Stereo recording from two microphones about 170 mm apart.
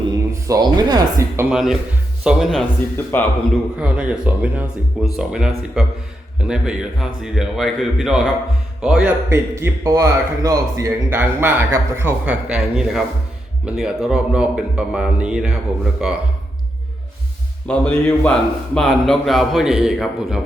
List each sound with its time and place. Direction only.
0.4 s speech: 20° right (ahead or behind)
1.5 s a man's voice: 5° right (ahead or behind)
3.1 s a man's voice: 10° left (ahead or behind)
3.8 s a man's voice: 5° right (ahead or behind)
17.7 s a man's voice: 10° left (ahead or behind)